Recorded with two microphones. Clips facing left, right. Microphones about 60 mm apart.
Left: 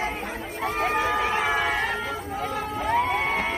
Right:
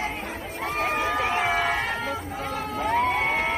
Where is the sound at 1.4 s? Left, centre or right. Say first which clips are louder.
Even; centre.